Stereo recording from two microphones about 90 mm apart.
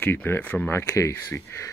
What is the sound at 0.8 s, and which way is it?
Speech, 35° left (ahead or behind).